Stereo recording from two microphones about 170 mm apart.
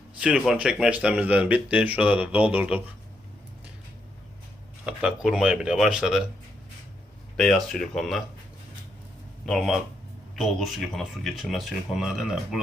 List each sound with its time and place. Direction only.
0.2 s speech: 5° right (ahead or behind)
4.9 s speech: 5° right (ahead or behind)
7.3 s speech: 5° left (ahead or behind)
9.5 s speech: centre (ahead or behind)